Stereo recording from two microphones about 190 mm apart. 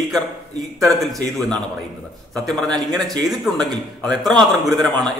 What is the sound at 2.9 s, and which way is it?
Speech, 20° right (ahead or behind).